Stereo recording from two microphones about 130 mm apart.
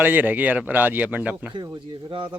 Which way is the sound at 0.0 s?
15° right (ahead or behind).